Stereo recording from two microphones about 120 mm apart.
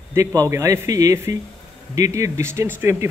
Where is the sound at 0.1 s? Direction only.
25° right (ahead or behind).